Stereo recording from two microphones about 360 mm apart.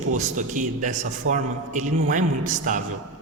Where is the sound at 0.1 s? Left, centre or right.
Right.